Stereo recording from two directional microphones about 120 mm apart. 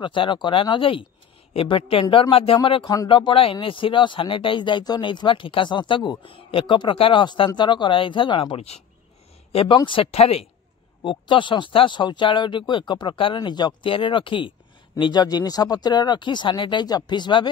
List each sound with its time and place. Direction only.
0.0 s speech: 45° left (ahead or behind)
11.0 s speech: 45° left (ahead or behind)